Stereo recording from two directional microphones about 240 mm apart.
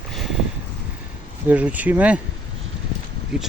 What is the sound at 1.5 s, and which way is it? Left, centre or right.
Speech, centre.